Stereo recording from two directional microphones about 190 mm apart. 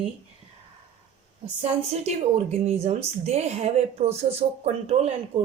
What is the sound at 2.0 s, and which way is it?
A woman's voice, 35° right (ahead or behind).